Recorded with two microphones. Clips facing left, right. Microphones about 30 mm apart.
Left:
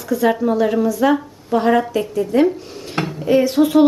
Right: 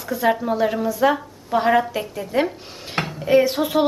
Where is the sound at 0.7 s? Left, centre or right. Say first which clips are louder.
Left 5 dB; centre.